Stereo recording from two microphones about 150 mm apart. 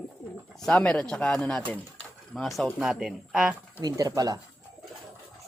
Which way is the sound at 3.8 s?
25° right (ahead or behind).